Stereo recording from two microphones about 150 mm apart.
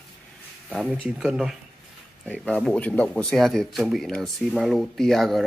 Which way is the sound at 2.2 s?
5° left (ahead or behind).